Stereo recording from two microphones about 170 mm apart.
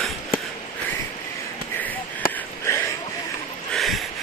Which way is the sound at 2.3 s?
15° left (ahead or behind).